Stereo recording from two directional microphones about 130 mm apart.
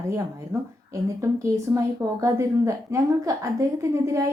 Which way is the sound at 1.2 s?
25° right (ahead or behind).